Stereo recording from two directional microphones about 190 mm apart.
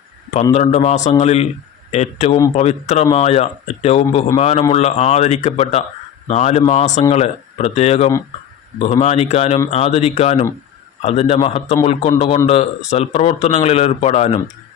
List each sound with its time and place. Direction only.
0.5 s speech: 35° left (ahead or behind)